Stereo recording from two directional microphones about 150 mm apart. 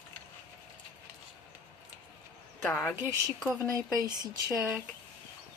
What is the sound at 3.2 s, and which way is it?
Speech, centre (ahead or behind).